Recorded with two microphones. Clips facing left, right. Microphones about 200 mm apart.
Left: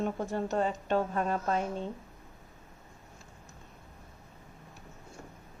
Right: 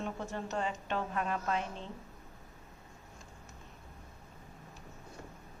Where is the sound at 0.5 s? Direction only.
35° left (ahead or behind).